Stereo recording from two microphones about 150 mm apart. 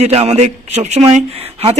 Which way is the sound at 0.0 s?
45° right (ahead or behind).